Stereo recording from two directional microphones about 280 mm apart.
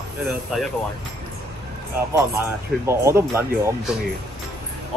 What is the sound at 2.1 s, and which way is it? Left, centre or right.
Speech, centre.